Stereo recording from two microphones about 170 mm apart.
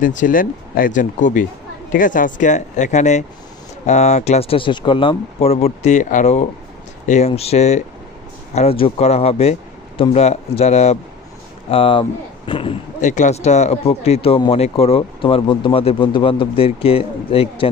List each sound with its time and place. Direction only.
0.0 s speech: 50° left (ahead or behind); by 12.7 s 30° left (ahead or behind)
13.0 s speech: 45° left (ahead or behind)